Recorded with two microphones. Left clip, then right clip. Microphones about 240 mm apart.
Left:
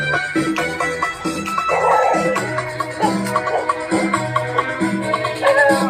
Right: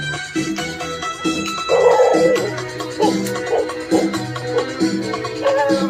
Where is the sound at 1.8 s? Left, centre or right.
Centre.